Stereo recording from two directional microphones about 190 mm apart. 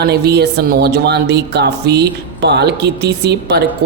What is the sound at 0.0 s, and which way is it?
Speech, 60° right (ahead or behind).